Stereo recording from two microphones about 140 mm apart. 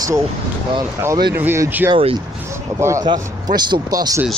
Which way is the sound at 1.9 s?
40° right (ahead or behind).